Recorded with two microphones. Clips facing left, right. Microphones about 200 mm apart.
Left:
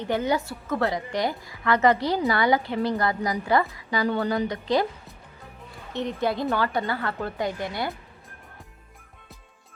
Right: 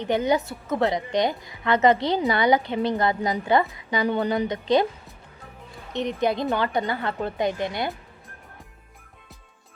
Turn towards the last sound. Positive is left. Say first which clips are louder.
# right 3 dB
turn(degrees=-20)  # may be behind; listen again after turning